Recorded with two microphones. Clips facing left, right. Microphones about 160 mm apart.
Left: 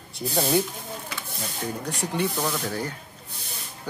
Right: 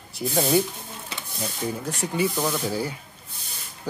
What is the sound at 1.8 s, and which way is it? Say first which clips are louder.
Speech: right 1 dB; centre (ahead or behind).